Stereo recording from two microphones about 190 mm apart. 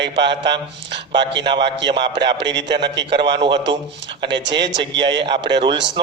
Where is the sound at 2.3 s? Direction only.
70° right (ahead or behind).